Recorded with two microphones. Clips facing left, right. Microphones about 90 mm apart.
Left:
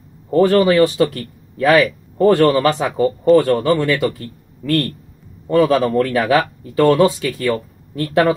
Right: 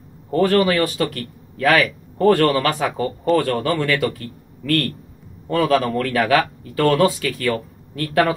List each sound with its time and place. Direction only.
0.3 s speech: 25° left (ahead or behind)